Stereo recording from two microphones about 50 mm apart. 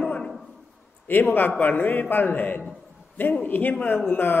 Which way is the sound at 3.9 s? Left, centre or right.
Left.